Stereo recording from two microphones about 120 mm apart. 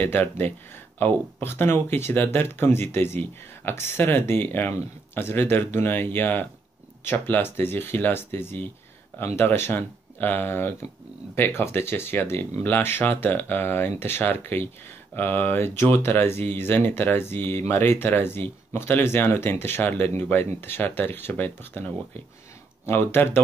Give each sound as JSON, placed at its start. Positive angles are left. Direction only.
{"t": 0.0, "sound": "speech", "side_deg": 15}